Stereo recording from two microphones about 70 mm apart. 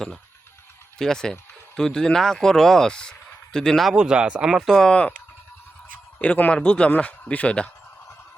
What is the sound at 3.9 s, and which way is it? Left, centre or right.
Speech, centre.